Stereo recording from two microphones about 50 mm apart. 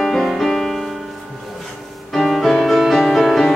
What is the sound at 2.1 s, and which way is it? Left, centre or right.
Music, centre.